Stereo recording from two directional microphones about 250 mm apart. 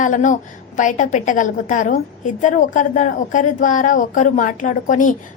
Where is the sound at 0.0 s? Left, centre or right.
Left.